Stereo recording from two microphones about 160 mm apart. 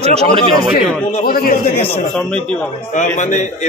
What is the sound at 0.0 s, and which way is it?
Speech, 40° right (ahead or behind).